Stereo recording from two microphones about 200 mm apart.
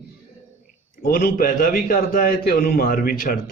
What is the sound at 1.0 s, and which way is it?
Speech, 50° left (ahead or behind).